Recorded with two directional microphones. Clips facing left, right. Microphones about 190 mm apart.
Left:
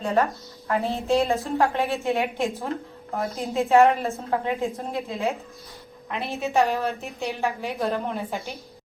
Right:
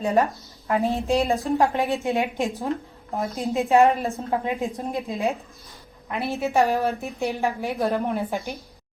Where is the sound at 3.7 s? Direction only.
15° right (ahead or behind).